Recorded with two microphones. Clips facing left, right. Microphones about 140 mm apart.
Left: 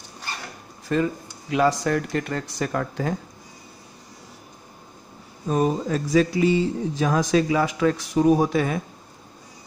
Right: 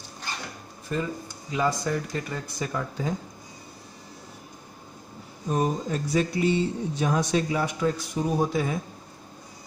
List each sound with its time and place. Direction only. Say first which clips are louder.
0.9 s speech: left 6 dB; 80° left; by 3.2 s 65° left (ahead or behind)
5.5 s speech: left 4 dB; 90° left; by 8.8 s 75° left (ahead or behind)